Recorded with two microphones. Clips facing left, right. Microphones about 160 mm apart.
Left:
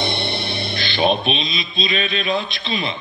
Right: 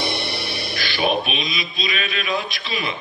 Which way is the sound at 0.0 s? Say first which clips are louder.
Left 2 dB; 25° left (ahead or behind).